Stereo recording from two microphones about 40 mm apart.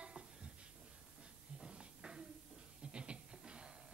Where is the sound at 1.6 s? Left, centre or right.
Centre.